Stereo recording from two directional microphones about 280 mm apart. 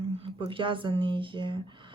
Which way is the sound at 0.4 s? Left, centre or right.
Centre.